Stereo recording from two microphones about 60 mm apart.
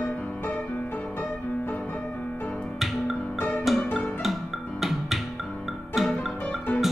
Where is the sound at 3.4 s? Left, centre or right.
Left.